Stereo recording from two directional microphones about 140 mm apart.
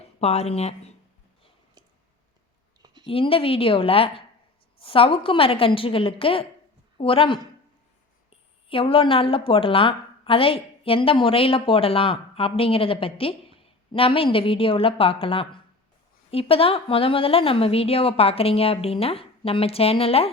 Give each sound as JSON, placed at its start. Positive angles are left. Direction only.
{"t": 0.0, "sound": "speech", "side_deg": 50}
{"t": 2.8, "sound": "a sound", "side_deg": -30}
{"t": 3.1, "sound": "a woman's voice", "side_deg": 40}